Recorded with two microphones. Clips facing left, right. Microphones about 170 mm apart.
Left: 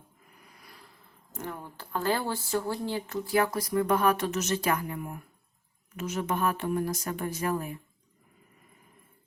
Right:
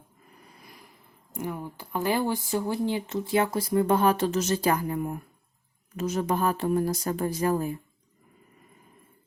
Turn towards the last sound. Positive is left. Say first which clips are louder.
# right 5 dB
turn(degrees=-30)  # may be behind; listen again after turning